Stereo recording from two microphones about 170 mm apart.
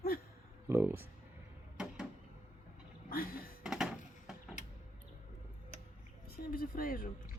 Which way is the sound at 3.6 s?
5° right (ahead or behind).